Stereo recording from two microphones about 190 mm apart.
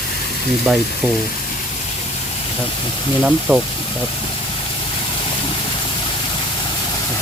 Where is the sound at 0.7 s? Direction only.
Centre (ahead or behind).